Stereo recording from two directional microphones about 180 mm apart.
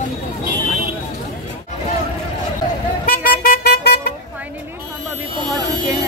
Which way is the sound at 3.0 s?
55° left (ahead or behind).